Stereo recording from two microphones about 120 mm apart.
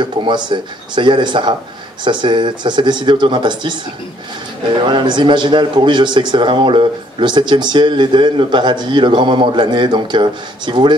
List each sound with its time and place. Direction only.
0.0 s a man's voice: 40° right (ahead or behind)
4.7 s a man's voice: 40° right (ahead or behind)